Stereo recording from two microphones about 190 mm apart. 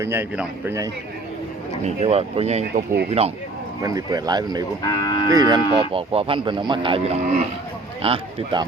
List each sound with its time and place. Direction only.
0.0 s speech: 15° right (ahead or behind)
1.8 s speech: 30° right (ahead or behind)
3.8 s speech: 20° right (ahead or behind)
4.8 s speech: 20° left (ahead or behind)
5.3 s speech: 20° right (ahead or behind)